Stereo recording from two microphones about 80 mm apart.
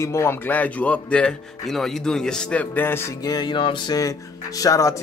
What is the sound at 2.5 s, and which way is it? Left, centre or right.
Speech, left.